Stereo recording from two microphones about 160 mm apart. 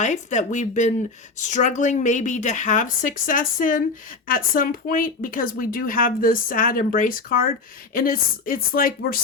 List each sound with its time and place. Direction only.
0.0 s a woman's voice: 50° left (ahead or behind); by 9.2 s 65° left (ahead or behind)